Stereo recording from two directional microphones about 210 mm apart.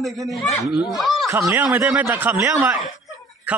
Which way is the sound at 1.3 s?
10° right (ahead or behind).